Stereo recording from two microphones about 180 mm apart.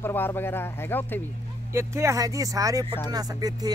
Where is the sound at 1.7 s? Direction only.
15° right (ahead or behind).